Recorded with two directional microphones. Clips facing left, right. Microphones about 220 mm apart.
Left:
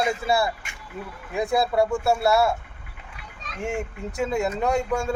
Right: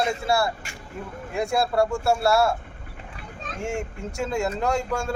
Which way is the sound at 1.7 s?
Centre (ahead or behind).